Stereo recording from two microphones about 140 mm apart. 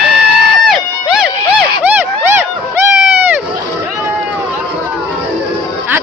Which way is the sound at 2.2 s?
15° right (ahead or behind).